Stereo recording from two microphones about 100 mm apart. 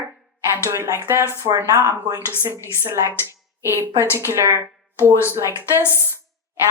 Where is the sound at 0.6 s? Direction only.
25° right (ahead or behind).